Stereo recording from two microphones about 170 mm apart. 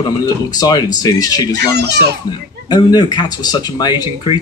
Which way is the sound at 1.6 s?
75° right (ahead or behind).